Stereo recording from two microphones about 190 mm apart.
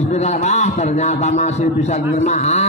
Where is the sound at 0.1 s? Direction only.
35° left (ahead or behind).